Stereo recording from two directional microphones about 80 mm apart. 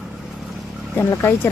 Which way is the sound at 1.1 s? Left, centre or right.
Left.